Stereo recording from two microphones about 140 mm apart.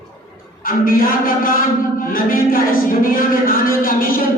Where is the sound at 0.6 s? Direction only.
90° left.